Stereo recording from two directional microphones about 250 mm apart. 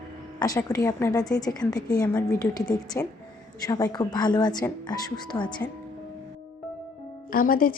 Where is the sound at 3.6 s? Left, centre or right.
Centre.